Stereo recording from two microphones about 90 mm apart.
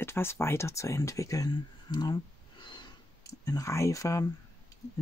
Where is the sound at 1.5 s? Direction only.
50° left (ahead or behind).